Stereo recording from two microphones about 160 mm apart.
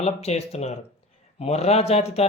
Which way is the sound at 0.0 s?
40° left (ahead or behind).